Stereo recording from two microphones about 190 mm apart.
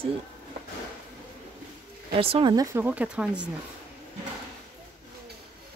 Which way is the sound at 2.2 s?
30° right (ahead or behind).